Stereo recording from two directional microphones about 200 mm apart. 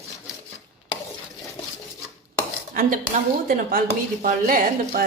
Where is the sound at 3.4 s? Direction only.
45° right (ahead or behind).